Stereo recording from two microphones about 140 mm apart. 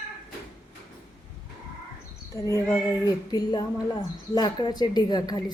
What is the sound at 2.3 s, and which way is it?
A woman's voice, 20° left (ahead or behind).